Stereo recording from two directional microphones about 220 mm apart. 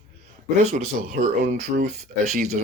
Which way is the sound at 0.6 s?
30° right (ahead or behind).